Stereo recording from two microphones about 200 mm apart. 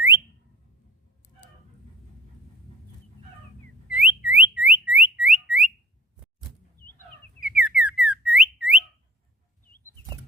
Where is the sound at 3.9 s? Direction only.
5° right (ahead or behind).